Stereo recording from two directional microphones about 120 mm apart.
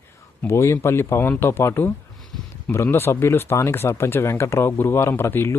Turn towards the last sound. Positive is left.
turn(degrees=20)  # may be behind; listen again after turning